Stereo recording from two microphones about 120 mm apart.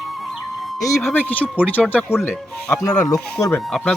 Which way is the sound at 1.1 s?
15° left (ahead or behind).